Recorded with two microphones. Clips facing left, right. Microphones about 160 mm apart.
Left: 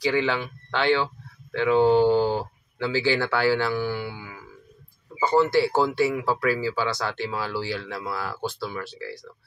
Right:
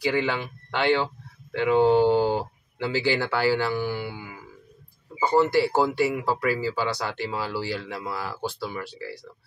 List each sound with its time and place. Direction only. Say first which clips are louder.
0.2 s speech: left 1 dB; 15° right (ahead or behind)
4.1 s music: right 1 dB; 15° right (ahead or behind)
5.2 s speech: even; 15° right (ahead or behind)